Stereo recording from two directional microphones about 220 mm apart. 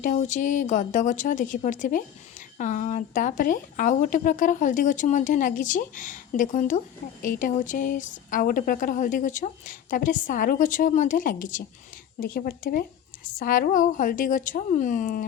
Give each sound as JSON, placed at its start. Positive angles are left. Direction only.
{"t": 0.0, "sound": "speech", "side_deg": 35}